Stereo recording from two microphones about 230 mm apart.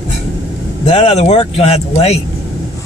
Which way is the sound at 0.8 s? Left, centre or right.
Left.